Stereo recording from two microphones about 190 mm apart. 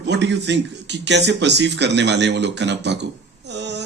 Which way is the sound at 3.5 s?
65° right (ahead or behind).